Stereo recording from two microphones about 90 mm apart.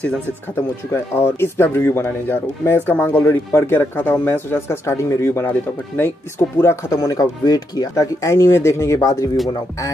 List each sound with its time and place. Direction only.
0.9 s speech: 25° left (ahead or behind)
6.3 s speech: 30° left (ahead or behind)